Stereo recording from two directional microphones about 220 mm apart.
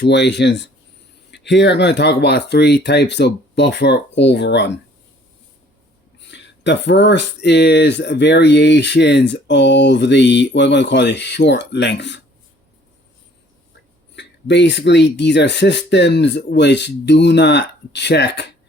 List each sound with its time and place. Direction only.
0.0 s speech: 50° left (ahead or behind)
6.1 s speech: 55° left (ahead or behind)
14.2 s speech: 55° left (ahead or behind)